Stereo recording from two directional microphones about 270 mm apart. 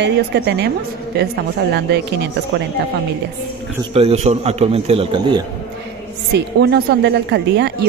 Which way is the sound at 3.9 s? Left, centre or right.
Right.